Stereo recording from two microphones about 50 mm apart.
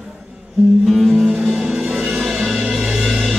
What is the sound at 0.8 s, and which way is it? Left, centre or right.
Music, centre.